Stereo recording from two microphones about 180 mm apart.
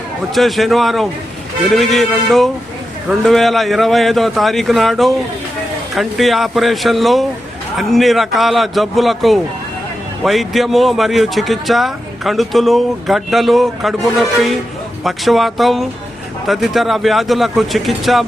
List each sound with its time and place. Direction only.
0.3 s speech: centre (ahead or behind)